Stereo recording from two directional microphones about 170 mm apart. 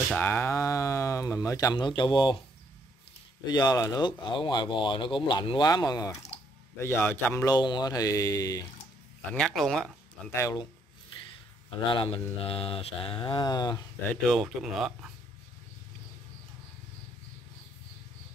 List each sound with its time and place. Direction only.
0.2 s speech: 15° left (ahead or behind)
3.4 s speech: 25° left (ahead or behind)
7.4 s speech: 25° left (ahead or behind)
9.3 s speech: 5° left (ahead or behind)
10.3 s speech: 15° left (ahead or behind)
11.7 s speech: 30° left (ahead or behind)
12.4 s mantra: 30° left (ahead or behind)
14.2 s speech: centre (ahead or behind)